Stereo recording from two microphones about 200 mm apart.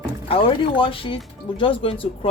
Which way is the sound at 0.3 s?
25° left (ahead or behind).